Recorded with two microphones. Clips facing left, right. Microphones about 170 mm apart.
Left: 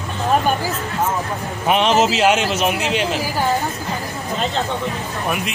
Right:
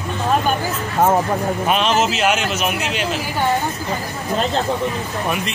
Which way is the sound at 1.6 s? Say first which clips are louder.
Left 4 dB; 20° left (ahead or behind).